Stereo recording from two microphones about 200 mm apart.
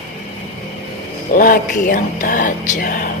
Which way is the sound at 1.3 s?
45° left (ahead or behind).